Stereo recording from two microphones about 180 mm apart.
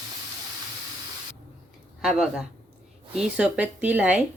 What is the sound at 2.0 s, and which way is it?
Speech, 5° right (ahead or behind).